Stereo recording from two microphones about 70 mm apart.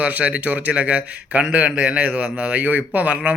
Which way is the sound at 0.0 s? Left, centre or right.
Centre.